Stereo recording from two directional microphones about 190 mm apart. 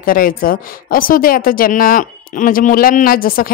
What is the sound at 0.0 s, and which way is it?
A woman's voice, 50° left (ahead or behind).